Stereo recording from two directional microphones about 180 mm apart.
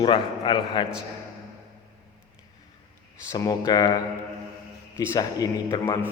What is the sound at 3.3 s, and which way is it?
A man's voice, 20° left (ahead or behind).